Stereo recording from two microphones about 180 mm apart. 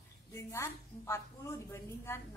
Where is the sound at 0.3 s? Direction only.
15° left (ahead or behind).